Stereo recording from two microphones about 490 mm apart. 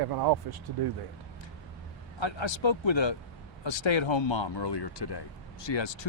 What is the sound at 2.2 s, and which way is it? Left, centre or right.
Speech, left.